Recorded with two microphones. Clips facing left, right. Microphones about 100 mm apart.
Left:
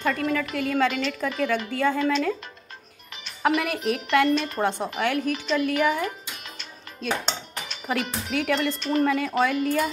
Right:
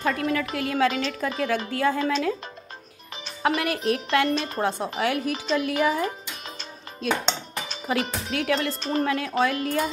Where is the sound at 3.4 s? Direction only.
Centre (ahead or behind).